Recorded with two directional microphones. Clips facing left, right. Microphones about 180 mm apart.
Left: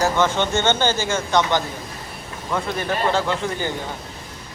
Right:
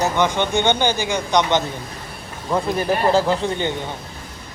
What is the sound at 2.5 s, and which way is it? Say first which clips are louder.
Speech: right 4 dB; 30° right (ahead or behind).